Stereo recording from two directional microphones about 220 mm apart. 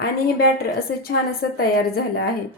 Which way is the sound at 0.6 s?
45° left (ahead or behind).